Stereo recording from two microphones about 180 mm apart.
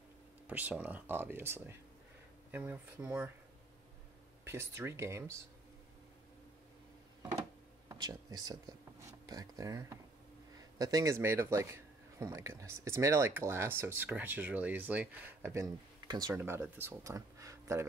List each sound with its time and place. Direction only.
0.5 s a man's voice: 10° right (ahead or behind)
4.5 s a man's voice: 15° right (ahead or behind)
7.9 s a man's voice: 20° right (ahead or behind)